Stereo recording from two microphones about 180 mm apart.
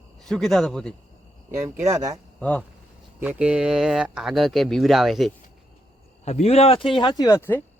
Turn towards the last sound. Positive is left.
turn(degrees=15)  # may be behind; listen again after turning